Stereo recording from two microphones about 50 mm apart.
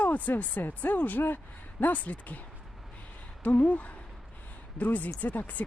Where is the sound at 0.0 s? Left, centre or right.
Left.